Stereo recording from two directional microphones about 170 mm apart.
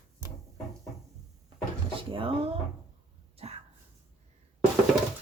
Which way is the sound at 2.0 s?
30° right (ahead or behind).